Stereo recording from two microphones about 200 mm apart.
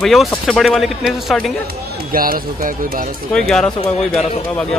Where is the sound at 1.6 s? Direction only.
45° right (ahead or behind).